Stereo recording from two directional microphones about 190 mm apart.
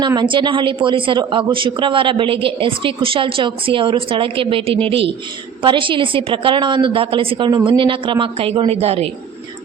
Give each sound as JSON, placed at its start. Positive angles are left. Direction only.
{"t": 0.0, "sound": "speech", "side_deg": -25}